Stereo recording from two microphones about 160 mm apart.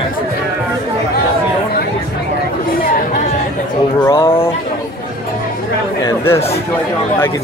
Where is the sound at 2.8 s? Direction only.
60° left (ahead or behind).